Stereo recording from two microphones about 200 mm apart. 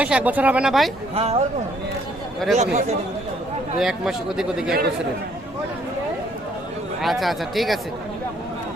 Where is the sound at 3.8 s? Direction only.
5° right (ahead or behind).